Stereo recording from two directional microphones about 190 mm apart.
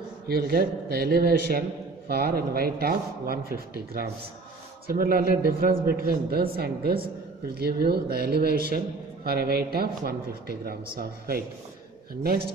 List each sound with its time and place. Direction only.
0.3 s a man's voice: 55° right (ahead or behind)